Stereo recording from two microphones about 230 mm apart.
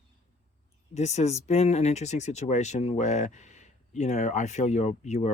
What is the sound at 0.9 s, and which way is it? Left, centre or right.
Speech, left.